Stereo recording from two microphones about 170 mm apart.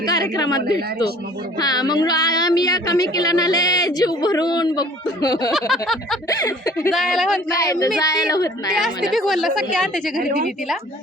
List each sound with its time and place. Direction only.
0.0 s speech: 20° left (ahead or behind)
5.5 s a woman's voice: centre (ahead or behind)
6.2 s speech: 20° left (ahead or behind)
6.9 s a woman's voice: centre (ahead or behind)
7.5 s speech: 20° left (ahead or behind)
8.7 s a woman's voice: centre (ahead or behind)
10.2 s a woman's voice: 60° right (ahead or behind)